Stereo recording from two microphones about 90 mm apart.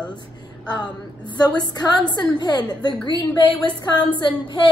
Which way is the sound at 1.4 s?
50° left (ahead or behind).